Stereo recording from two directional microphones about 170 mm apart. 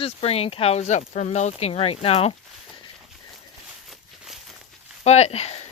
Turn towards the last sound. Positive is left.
turn(degrees=40)  # may be behind; listen again after turning